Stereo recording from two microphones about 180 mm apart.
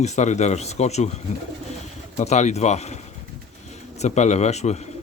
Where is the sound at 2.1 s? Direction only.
40° left (ahead or behind).